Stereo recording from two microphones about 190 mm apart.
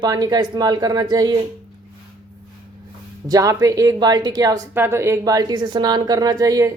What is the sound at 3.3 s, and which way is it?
A woman's voice, 20° right (ahead or behind).